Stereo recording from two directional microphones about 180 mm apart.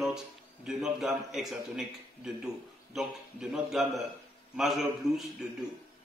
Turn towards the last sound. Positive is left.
turn(degrees=0)  # may be behind; listen again after turning